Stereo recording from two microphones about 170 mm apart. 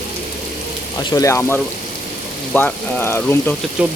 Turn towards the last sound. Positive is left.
turn(degrees=-5)  # may be behind; listen again after turning